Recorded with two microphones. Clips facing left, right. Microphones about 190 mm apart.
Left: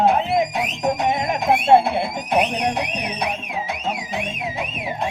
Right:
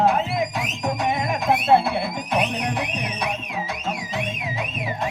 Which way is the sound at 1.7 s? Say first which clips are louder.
Left 4 dB; 20° left (ahead or behind).